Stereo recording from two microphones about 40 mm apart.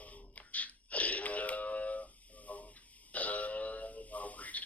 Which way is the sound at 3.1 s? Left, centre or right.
Left.